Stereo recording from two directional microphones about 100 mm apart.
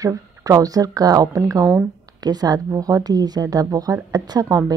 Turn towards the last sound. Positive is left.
turn(degrees=-40)  # may be behind; listen again after turning